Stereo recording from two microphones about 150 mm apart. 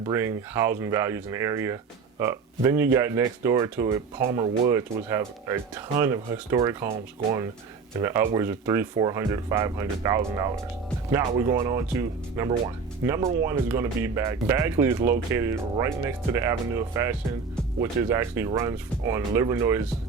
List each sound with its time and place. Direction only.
0.0 s speech: 20° right (ahead or behind)
7.9 s speech: 15° right (ahead or behind)
11.5 s speech: 20° right (ahead or behind)